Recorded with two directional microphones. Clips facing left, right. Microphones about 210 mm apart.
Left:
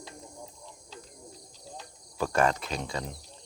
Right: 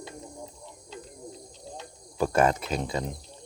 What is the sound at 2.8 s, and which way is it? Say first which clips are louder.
Speech: right 4 dB; 25° right (ahead or behind).